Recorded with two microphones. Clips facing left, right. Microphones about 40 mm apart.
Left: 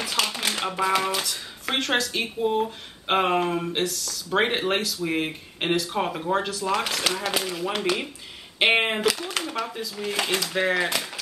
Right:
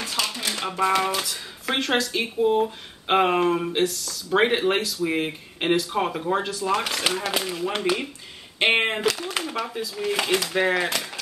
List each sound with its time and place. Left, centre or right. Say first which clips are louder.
0.1 s typewriter: left 2 dB; left
0.7 s speech: right 3 dB; centre